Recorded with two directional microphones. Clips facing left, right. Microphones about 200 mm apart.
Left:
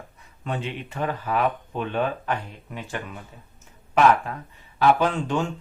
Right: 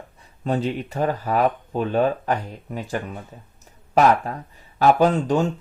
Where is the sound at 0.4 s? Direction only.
40° right (ahead or behind).